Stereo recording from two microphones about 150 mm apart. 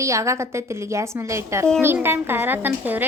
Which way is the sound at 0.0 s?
20° right (ahead or behind).